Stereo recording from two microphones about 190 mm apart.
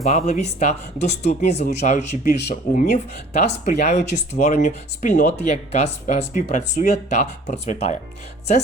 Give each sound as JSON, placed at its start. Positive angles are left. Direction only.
{"t": 0.0, "sound": "speech", "side_deg": 35}